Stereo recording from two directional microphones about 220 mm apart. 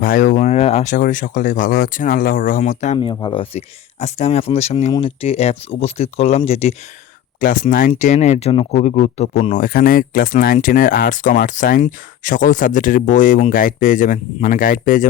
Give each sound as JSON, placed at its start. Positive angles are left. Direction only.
{"t": 0.0, "sound": "speech", "side_deg": 40}